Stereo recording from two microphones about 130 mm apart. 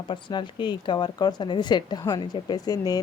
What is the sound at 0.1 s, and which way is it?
Speech, 35° left (ahead or behind).